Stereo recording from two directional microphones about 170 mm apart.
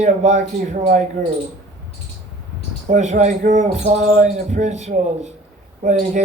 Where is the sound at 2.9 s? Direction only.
45° right (ahead or behind).